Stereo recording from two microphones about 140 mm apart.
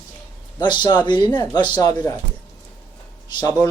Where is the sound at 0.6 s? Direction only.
30° left (ahead or behind).